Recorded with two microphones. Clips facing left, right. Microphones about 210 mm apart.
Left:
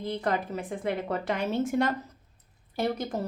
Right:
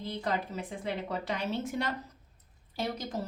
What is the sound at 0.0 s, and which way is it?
A woman's voice, 55° left (ahead or behind).